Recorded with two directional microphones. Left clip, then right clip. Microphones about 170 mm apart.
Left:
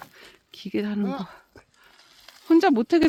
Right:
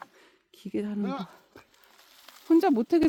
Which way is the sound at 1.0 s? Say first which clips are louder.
Left 3 dB; 30° left (ahead or behind).